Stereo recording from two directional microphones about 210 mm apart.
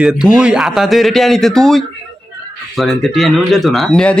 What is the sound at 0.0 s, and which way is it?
Speech, 5° right (ahead or behind).